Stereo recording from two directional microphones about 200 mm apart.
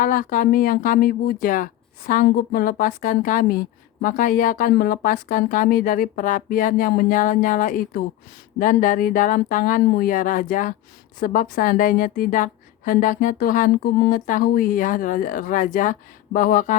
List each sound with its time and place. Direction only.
0.0 s speech: 40° left (ahead or behind)